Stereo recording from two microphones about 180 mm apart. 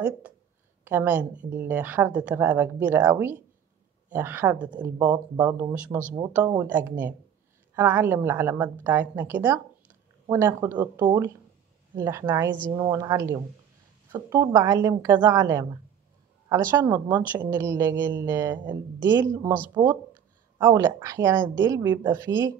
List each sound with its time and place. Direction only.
0.8 s a woman's voice: 10° right (ahead or behind)
18.5 s a woman's voice: 25° right (ahead or behind)
18.9 s speech: 15° right (ahead or behind)
20.6 s speech: 15° right (ahead or behind)